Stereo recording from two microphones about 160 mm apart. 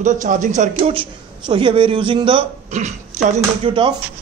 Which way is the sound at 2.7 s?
45° right (ahead or behind).